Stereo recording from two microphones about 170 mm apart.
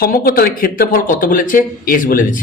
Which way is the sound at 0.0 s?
60° left (ahead or behind).